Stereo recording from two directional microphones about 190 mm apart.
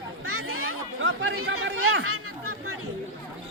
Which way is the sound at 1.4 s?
75° right (ahead or behind).